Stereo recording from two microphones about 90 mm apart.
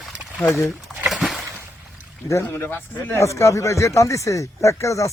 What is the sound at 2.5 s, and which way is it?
Speech, 25° left (ahead or behind).